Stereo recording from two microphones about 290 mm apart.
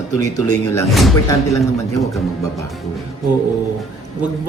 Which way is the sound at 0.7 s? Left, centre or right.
Centre.